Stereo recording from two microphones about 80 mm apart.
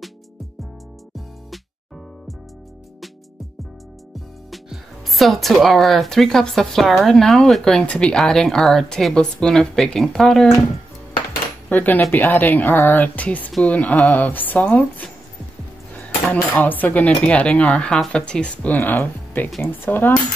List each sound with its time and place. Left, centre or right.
4.5 s speech: centre
11.7 s speech: left
15.9 s dishes: left
17.2 s speech: centre